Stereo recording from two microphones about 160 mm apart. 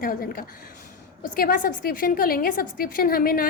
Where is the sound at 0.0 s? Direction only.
65° left (ahead or behind).